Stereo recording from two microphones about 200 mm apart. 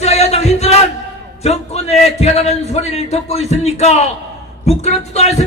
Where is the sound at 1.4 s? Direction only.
30° left (ahead or behind).